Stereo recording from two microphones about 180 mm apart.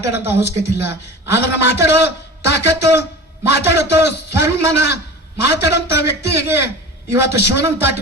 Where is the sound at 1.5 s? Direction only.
70° left (ahead or behind).